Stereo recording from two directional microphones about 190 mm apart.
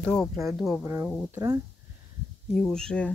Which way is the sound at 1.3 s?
15° right (ahead or behind).